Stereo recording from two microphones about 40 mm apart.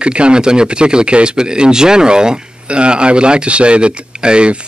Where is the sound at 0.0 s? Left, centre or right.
Right.